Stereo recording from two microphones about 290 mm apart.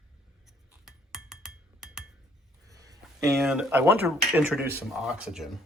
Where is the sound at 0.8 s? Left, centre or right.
Centre.